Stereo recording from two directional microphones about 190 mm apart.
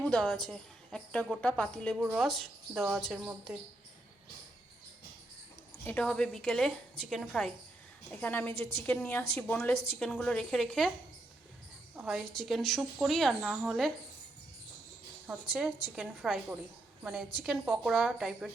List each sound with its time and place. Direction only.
0.0 s a woman's voice: 5° left (ahead or behind)
5.8 s a woman's voice: 5° left (ahead or behind)
11.9 s speech: centre (ahead or behind)
15.3 s speech: centre (ahead or behind)